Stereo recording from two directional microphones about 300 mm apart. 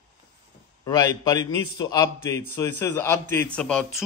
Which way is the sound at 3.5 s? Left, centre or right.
Centre.